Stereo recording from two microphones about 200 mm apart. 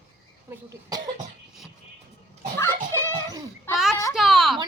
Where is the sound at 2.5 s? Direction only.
15° left (ahead or behind).